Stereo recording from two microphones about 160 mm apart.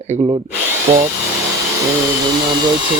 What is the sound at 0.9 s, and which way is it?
Speech, 45° right (ahead or behind).